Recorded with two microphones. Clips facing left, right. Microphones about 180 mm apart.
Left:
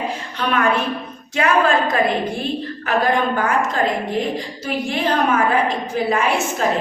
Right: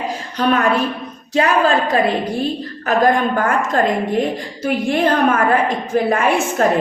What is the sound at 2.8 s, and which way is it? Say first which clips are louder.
A woman's voice: right 4 dB; 45° right (ahead or behind).